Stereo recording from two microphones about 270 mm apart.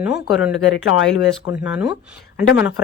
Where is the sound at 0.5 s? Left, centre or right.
Left.